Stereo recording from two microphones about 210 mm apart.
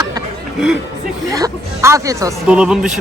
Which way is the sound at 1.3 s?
15° right (ahead or behind).